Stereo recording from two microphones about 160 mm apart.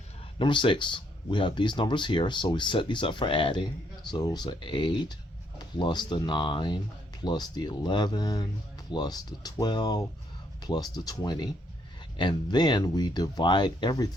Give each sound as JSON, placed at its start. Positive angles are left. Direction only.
{"t": 0.3, "sound": "speech", "side_deg": 30}